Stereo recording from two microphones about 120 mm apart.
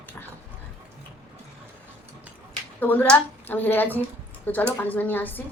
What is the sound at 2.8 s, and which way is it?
A woman's voice, 15° left (ahead or behind).